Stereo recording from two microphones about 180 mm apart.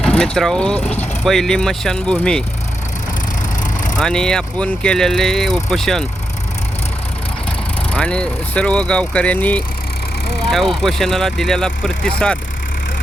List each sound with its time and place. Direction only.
0.0 s vehicle: 5° left (ahead or behind)
0.3 s speech: 5° left (ahead or behind)
3.6 s vehicle: 45° left (ahead or behind)
3.9 s speech: 5° left (ahead or behind)
7.9 s speech: 5° left (ahead or behind)